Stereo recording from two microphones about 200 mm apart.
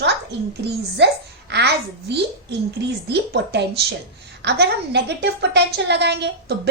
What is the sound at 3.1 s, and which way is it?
A woman's voice, 55° right (ahead or behind).